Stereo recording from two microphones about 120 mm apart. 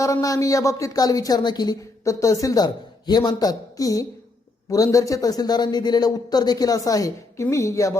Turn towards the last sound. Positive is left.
turn(degrees=25)  # may be behind; listen again after turning